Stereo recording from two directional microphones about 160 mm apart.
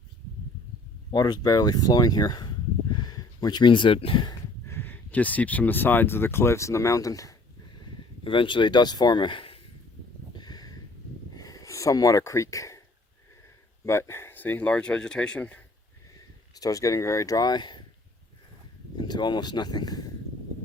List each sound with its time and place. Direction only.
1.1 s speech: 25° left (ahead or behind)
4.7 s speech: 10° left (ahead or behind)
8.2 s speech: 30° left (ahead or behind)
10.3 s a sound: 25° left (ahead or behind)
13.8 s speech: 15° left (ahead or behind)
16.6 s speech: 20° left (ahead or behind)
18.9 s speech: 25° left (ahead or behind)